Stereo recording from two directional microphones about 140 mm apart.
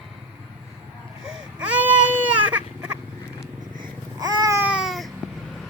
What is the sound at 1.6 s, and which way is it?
Baby cry, 10° right (ahead or behind).